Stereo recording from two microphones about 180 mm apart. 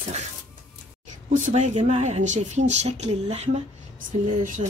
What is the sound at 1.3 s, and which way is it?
Speech, 40° right (ahead or behind).